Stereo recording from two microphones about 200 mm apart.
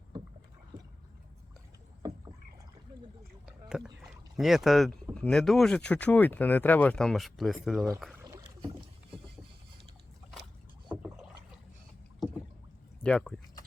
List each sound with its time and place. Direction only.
2.0 s rowboat: 15° right (ahead or behind)
3.7 s rowboat: centre (ahead or behind)
5.1 s speech: 5° left (ahead or behind)
8.2 s boat: 15° right (ahead or behind)
10.8 s rowboat: 5° right (ahead or behind)
13.0 s speech: 5° left (ahead or behind)